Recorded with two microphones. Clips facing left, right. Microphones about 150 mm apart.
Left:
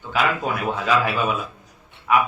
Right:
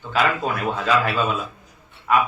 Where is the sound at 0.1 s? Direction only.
15° left (ahead or behind).